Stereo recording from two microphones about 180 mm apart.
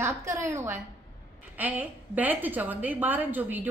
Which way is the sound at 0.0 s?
15° right (ahead or behind).